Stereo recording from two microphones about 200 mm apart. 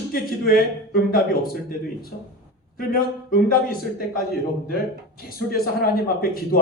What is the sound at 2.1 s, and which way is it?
A man's voice, 50° left (ahead or behind).